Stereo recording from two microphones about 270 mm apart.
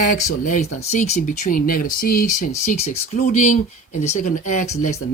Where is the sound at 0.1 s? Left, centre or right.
Left.